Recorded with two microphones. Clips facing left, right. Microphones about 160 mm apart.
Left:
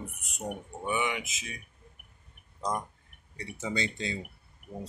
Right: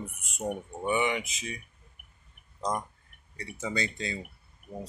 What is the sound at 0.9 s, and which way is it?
Speech, 5° left (ahead or behind).